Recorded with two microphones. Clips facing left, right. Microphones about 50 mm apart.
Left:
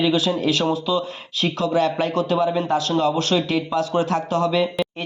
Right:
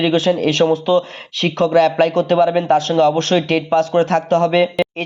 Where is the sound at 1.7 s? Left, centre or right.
Right.